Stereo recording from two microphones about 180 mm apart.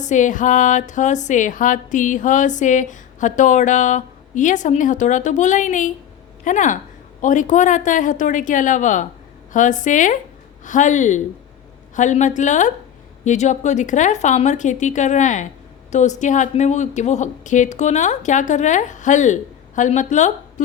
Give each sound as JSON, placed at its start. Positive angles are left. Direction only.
{"t": 0.0, "sound": "music", "side_deg": 45}
{"t": 6.4, "sound": "speech", "side_deg": 45}
{"t": 7.2, "sound": "music", "side_deg": 45}